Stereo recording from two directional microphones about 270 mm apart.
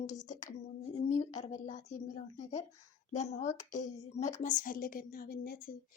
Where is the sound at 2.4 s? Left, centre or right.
Left.